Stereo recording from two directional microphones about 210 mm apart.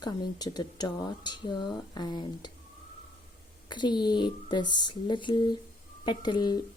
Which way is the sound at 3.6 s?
20° left (ahead or behind).